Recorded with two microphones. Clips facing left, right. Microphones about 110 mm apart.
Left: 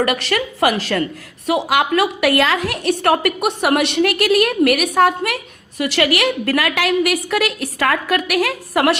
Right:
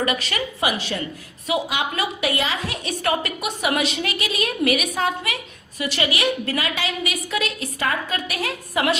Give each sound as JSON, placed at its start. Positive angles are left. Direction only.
{"t": 0.0, "sound": "a woman's voice", "side_deg": 65}